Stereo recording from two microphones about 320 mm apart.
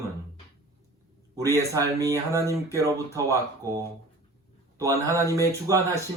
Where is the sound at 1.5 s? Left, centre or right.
Centre.